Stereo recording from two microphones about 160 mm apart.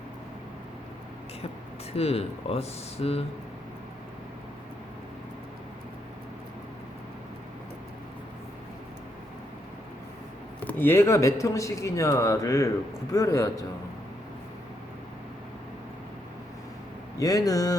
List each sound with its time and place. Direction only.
1.9 s speech: 40° left (ahead or behind)
10.7 s speech: 15° left (ahead or behind)
17.2 s speech: 20° left (ahead or behind)